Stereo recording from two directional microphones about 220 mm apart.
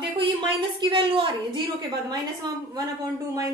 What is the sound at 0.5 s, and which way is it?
A woman's voice, 20° right (ahead or behind).